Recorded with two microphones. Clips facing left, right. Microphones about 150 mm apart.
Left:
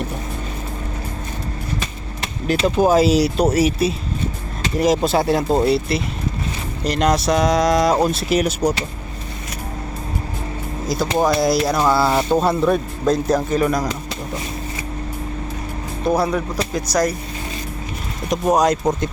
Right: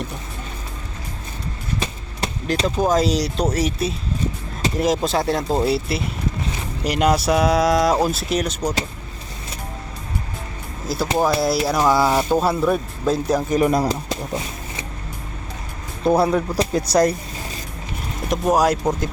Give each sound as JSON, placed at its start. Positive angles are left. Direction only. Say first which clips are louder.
{"t": 2.6, "sound": "speech", "louder": "left 4 dB", "side_deg": 5}
{"t": 10.8, "sound": "speech", "louder": "left 1 dB", "side_deg": -5}
{"t": 16.2, "sound": "speech", "louder": "right 2 dB", "side_deg": -30}
{"t": 18.3, "sound": "speech", "louder": "left 1 dB", "side_deg": -5}